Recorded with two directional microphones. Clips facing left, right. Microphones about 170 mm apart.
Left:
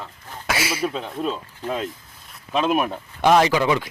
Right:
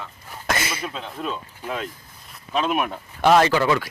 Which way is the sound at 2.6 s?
35° left (ahead or behind).